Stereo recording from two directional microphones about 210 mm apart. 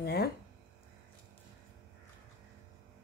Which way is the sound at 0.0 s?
50° left (ahead or behind).